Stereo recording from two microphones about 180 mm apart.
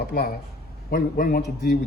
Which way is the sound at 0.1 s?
55° left (ahead or behind).